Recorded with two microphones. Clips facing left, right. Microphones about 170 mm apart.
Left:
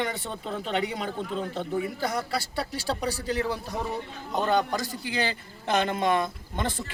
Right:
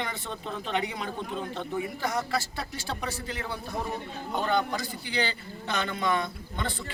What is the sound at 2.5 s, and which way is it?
Speech, 35° left (ahead or behind).